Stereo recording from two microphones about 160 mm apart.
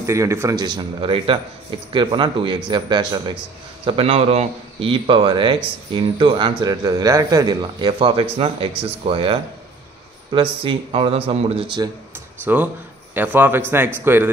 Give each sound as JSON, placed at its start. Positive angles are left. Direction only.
{"t": 0.0, "sound": "a man's voice", "side_deg": -20}
{"t": 10.6, "sound": "a man's voice", "side_deg": -35}
{"t": 12.5, "sound": "a man's voice", "side_deg": -10}